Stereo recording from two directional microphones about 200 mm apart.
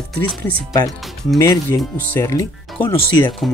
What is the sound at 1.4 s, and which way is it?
Speech, 15° left (ahead or behind).